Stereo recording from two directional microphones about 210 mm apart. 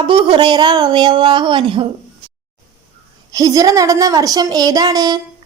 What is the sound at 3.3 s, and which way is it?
A woman's voice, 15° right (ahead or behind).